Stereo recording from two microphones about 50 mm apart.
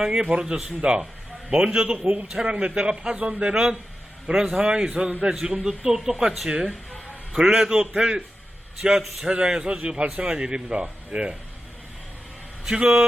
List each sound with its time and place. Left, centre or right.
0.0 s a man's voice: right
12.6 s a man's voice: centre